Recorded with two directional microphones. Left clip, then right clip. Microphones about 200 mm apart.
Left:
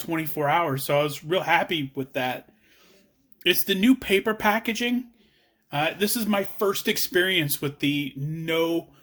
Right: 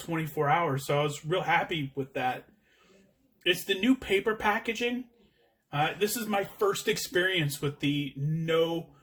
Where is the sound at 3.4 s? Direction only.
50° left (ahead or behind).